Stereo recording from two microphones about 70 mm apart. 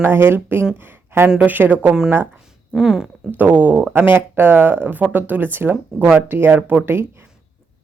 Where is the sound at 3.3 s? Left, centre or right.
Right.